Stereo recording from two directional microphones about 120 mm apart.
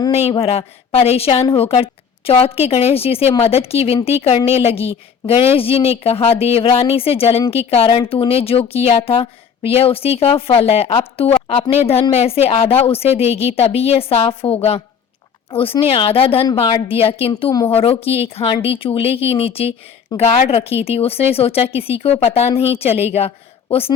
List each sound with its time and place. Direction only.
0.1 s speech: 55° left (ahead or behind)